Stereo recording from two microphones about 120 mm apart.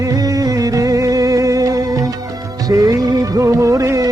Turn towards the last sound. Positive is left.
turn(degrees=-30)  # may be behind; listen again after turning